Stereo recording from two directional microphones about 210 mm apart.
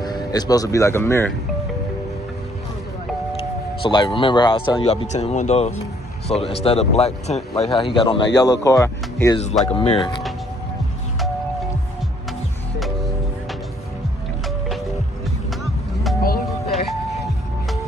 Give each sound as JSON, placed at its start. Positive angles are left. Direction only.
{"t": 0.0, "sound": "speech", "side_deg": 20}
{"t": 3.3, "sound": "speech", "side_deg": 25}
{"t": 12.7, "sound": "music", "side_deg": 0}
{"t": 16.2, "sound": "music", "side_deg": 45}
{"t": 16.4, "sound": "music", "side_deg": 0}